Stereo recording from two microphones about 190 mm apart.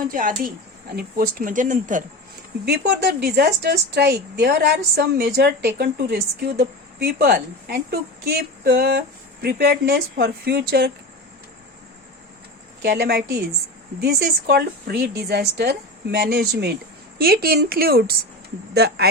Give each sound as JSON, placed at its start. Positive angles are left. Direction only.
{"t": 0.1, "sound": "speech", "side_deg": -45}
{"t": 2.6, "sound": "a woman's voice", "side_deg": -60}
{"t": 12.8, "sound": "a woman's voice", "side_deg": -60}